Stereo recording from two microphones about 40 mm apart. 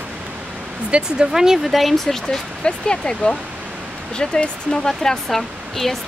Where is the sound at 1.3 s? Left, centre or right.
Centre.